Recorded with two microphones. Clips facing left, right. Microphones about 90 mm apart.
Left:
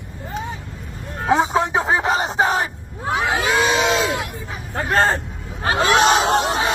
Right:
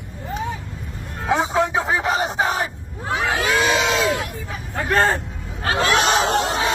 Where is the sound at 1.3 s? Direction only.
25° left (ahead or behind).